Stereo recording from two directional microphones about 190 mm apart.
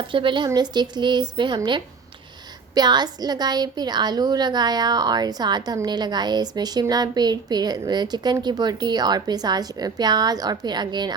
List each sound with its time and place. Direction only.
0.1 s a woman's voice: 25° right (ahead or behind)